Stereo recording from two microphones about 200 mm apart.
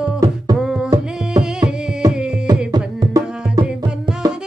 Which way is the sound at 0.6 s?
Centre (ahead or behind).